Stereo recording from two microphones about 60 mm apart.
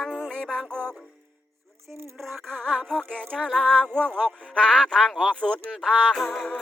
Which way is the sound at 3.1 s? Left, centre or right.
Centre.